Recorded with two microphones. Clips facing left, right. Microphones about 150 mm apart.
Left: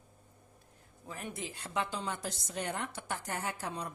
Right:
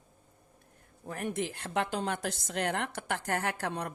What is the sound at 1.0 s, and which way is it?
A woman's voice, 65° right (ahead or behind).